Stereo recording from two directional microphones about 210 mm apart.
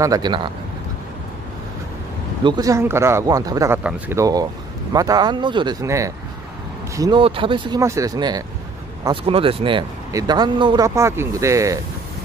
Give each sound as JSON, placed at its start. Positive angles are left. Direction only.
{"t": 0.0, "sound": "speech", "side_deg": -20}
{"t": 2.4, "sound": "speech", "side_deg": -20}